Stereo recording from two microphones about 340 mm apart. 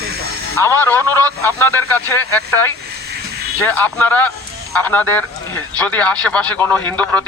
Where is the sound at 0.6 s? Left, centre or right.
Centre.